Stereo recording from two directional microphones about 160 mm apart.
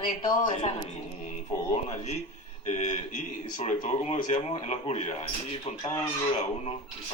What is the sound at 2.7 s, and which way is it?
Speech, 50° left (ahead or behind).